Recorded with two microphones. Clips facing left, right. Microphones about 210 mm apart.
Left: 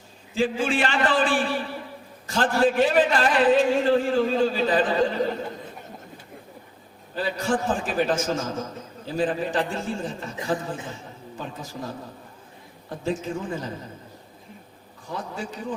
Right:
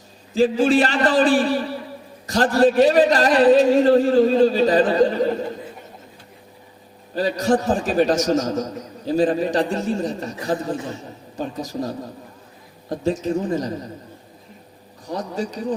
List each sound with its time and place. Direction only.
0.3 s a man's voice: 40° right (ahead or behind)
7.2 s a man's voice: 40° right (ahead or behind)
15.0 s a man's voice: 40° right (ahead or behind)